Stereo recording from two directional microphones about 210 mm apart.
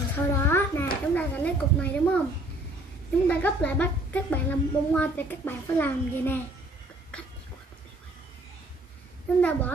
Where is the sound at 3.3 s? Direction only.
5° left (ahead or behind).